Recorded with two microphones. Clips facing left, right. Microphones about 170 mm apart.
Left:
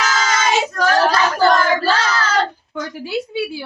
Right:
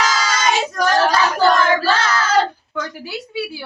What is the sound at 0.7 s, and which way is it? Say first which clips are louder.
Child singing: left 1 dB; 15° right (ahead or behind).